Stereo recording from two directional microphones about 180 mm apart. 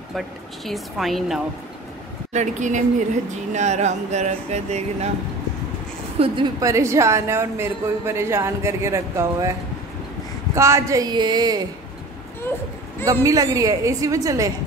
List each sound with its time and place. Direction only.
0.7 s a woman's voice: centre (ahead or behind)
2.3 s speech: 45° right (ahead or behind)
6.1 s a woman's voice: 30° right (ahead or behind)
6.6 s a woman's voice: 15° right (ahead or behind)
10.5 s a woman's voice: 15° right (ahead or behind)
13.0 s a woman's voice: 20° right (ahead or behind)